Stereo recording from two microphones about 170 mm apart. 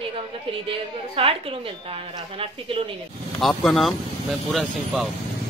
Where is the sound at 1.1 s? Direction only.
35° right (ahead or behind).